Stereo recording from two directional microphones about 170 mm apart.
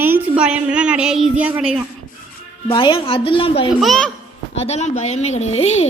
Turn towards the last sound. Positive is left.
turn(degrees=40)  # may be behind; listen again after turning